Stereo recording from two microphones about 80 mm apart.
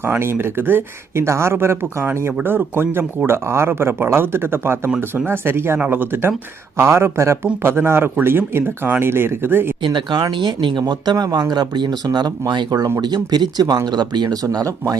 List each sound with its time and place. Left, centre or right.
0.2 s speech: right
9.8 s speech: right
14.4 s speech: right